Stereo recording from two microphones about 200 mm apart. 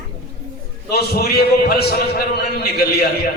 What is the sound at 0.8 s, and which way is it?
A man's voice, 50° left (ahead or behind).